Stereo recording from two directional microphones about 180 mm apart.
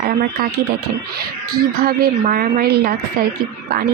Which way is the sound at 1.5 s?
60° right (ahead or behind).